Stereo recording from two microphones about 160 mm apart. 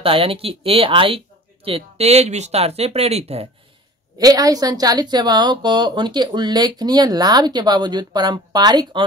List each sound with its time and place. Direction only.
0.0 s speech: 35° right (ahead or behind)
4.2 s a woman's voice: 20° right (ahead or behind)